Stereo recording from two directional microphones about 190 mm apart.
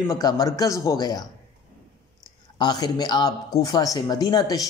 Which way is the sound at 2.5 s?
20° left (ahead or behind).